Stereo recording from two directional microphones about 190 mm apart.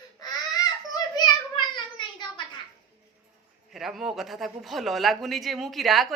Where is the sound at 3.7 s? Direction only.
Centre (ahead or behind).